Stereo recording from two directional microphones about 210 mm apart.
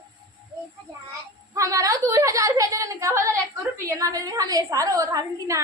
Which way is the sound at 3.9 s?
15° right (ahead or behind).